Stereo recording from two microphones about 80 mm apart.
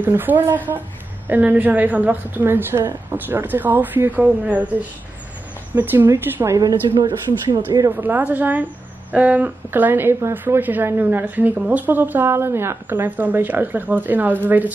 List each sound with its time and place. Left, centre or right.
0.0 s a woman's voice: right
5.8 s a woman's voice: right
6.5 s a woman's voice: right
7.9 s a woman's voice: right